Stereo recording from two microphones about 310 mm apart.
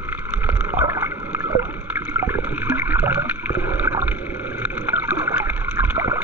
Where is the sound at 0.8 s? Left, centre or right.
Centre.